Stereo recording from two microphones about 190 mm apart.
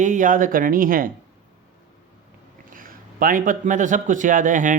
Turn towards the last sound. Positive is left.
turn(degrees=-45)  # may be behind; listen again after turning